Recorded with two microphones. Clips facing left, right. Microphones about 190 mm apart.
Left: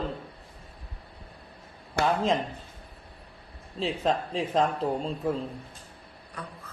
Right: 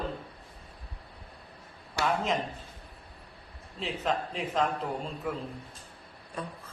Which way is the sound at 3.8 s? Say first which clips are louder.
Left 4 dB; 30° left (ahead or behind).